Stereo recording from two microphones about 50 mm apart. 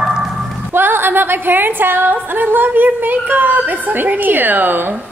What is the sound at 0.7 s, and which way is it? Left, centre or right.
A woman's voice, right.